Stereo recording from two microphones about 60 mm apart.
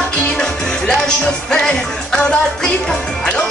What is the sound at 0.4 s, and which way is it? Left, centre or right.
Music, centre.